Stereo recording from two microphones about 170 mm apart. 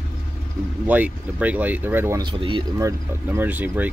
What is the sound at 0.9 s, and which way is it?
Speech, 10° right (ahead or behind).